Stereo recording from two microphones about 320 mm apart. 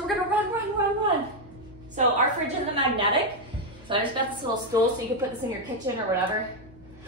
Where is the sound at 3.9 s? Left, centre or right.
Centre.